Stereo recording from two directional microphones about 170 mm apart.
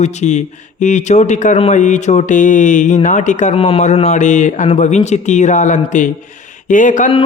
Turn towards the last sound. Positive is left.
turn(degrees=50)  # may be behind; listen again after turning